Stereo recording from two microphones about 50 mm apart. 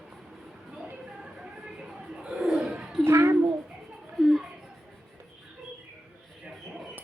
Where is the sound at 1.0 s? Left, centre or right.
Centre.